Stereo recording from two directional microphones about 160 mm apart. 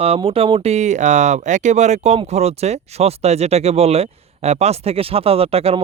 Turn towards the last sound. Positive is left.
turn(degrees=-40)  # may be behind; listen again after turning